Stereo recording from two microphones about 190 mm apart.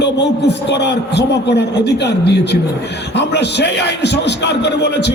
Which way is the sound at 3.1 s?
65° left (ahead or behind).